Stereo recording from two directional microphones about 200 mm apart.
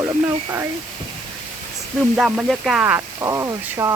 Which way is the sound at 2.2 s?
Centre (ahead or behind).